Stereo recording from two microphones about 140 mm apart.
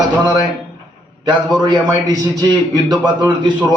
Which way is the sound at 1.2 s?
30° right (ahead or behind).